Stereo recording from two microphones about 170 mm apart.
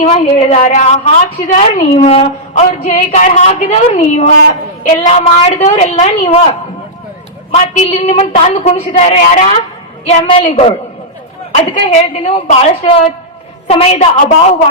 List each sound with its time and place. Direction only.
0.0 s a woman's voice: 35° left (ahead or behind)
7.5 s a woman's voice: 45° left (ahead or behind)